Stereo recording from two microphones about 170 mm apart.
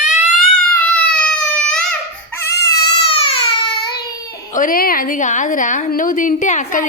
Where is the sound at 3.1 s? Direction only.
30° left (ahead or behind).